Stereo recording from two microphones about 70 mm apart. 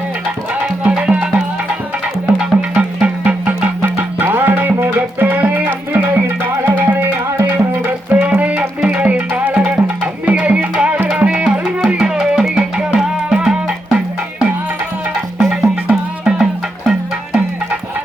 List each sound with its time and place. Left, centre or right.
0.9 s music: centre
2.4 s music: centre
3.8 s music: right
8.2 s music: centre